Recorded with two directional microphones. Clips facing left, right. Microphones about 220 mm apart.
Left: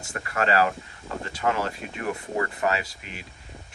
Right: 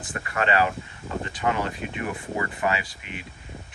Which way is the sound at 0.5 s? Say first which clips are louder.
Left 1 dB; centre (ahead or behind).